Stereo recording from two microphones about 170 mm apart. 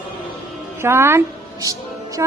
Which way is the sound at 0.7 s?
15° right (ahead or behind).